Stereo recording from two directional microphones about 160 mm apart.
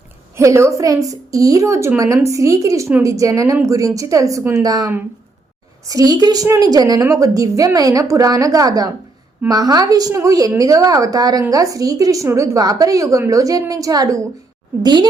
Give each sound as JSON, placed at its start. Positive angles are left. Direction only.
{"t": 0.3, "sound": "speech", "side_deg": -15}